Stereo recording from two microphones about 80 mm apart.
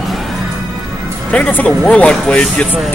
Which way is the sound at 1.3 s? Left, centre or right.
Centre.